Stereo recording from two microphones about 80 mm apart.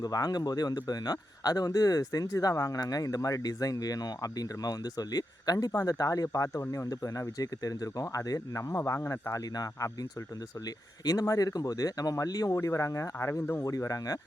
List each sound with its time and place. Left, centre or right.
0.0 s speech: left
11.0 s speech: left
12.5 s speech: left
13.7 s speech: left